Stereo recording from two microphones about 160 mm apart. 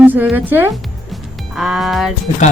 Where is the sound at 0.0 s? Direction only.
10° right (ahead or behind).